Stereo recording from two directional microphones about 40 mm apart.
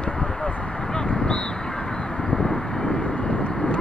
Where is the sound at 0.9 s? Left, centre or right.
Left.